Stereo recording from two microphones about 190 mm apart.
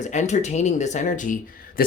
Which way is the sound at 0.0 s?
40° left (ahead or behind).